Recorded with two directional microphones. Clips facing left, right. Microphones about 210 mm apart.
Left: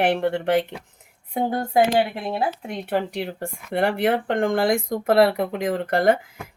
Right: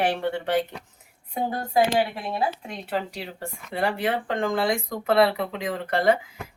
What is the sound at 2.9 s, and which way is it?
Speech, 60° left (ahead or behind).